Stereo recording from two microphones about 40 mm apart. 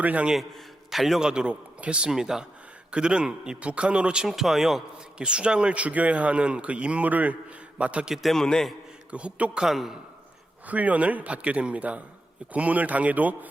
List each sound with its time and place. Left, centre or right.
0.0 s a man's voice: right
0.9 s a man's voice: centre
1.2 s a man's voice: right
2.0 s a man's voice: centre
2.9 s a man's voice: right
4.3 s a man's voice: centre
5.1 s a man's voice: right
7.8 s a man's voice: right
8.1 s a man's voice: centre
8.4 s a man's voice: centre
9.0 s a man's voice: right
9.6 s a man's voice: centre
10.7 s a man's voice: right